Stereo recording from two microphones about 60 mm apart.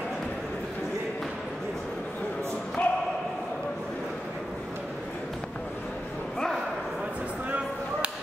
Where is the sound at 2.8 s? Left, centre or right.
Centre.